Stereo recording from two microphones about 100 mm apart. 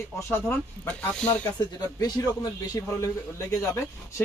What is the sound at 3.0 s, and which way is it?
Speech, 25° left (ahead or behind).